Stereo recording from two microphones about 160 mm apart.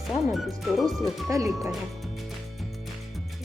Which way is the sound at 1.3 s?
20° right (ahead or behind).